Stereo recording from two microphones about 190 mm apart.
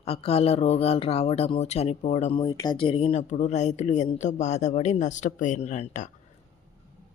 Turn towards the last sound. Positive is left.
turn(degrees=40)  # may be behind; listen again after turning